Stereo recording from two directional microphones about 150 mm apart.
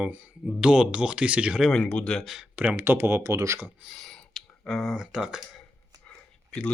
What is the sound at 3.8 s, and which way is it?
Speech, centre (ahead or behind).